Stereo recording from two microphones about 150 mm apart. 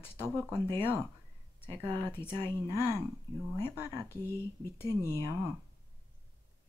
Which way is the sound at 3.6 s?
15° left (ahead or behind).